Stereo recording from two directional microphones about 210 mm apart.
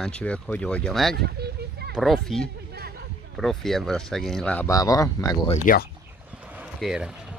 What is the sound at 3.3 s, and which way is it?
Speech, centre (ahead or behind).